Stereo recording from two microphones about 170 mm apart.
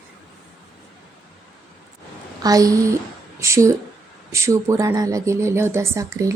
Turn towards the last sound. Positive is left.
turn(degrees=-15)  # may be behind; listen again after turning